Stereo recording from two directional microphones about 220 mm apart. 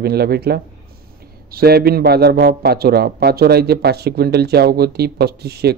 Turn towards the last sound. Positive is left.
turn(degrees=-45)  # may be behind; listen again after turning